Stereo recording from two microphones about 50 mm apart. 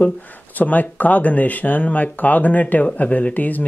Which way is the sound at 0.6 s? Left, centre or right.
Left.